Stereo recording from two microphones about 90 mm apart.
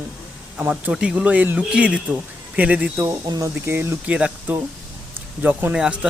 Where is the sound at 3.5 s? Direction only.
25° right (ahead or behind).